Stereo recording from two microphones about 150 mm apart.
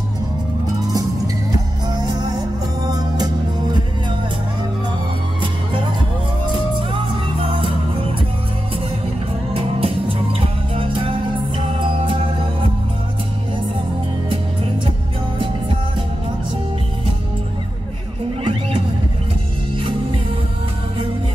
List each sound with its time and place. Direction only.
1.9 s music: 25° right (ahead or behind)
7.4 s music: 40° right (ahead or behind)
9.5 s music: 40° right (ahead or behind)
15.3 s music: 35° right (ahead or behind)
18.4 s music: 35° right (ahead or behind)